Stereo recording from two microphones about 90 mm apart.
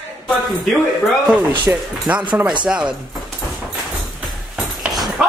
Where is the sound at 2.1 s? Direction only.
15° right (ahead or behind).